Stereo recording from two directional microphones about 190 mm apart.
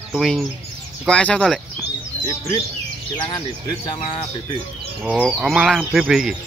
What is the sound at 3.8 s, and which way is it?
Speech, 25° left (ahead or behind).